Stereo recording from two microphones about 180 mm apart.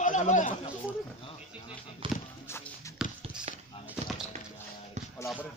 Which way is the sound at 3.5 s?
35° right (ahead or behind).